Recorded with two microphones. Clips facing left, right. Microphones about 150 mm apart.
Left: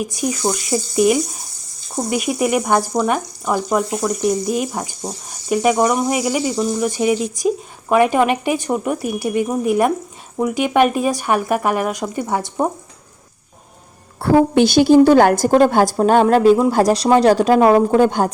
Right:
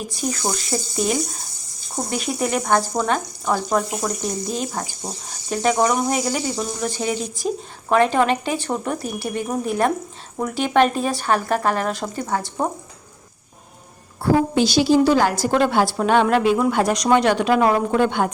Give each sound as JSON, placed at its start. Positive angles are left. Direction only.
{"t": 0.2, "sound": "speech", "side_deg": 5}
{"t": 14.2, "sound": "a woman's voice", "side_deg": 60}